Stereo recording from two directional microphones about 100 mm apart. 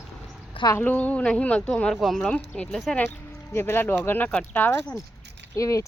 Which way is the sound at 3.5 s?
25° left (ahead or behind).